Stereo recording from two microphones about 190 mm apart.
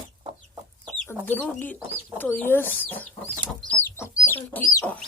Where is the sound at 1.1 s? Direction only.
10° left (ahead or behind).